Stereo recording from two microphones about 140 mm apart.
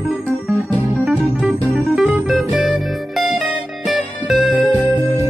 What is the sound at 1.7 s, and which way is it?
Music, centre (ahead or behind).